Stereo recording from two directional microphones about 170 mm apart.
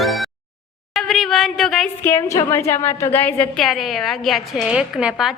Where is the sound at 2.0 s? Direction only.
15° left (ahead or behind).